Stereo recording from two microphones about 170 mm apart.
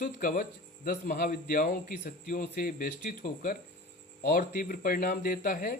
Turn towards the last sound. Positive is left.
turn(degrees=55)  # may be behind; listen again after turning